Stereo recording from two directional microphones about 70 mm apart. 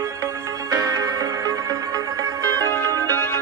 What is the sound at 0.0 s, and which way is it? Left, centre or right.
Music, right.